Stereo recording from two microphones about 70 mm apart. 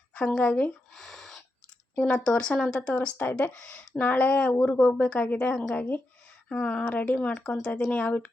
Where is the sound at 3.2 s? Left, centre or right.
Left.